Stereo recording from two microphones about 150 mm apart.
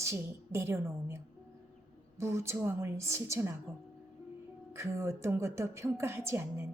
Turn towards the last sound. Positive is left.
turn(degrees=-15)  # may be behind; listen again after turning